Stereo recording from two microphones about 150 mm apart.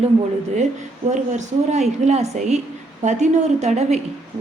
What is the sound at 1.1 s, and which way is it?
A woman's voice, 50° right (ahead or behind).